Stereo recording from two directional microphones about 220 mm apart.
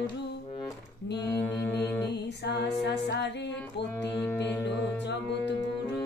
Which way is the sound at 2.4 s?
50° left (ahead or behind).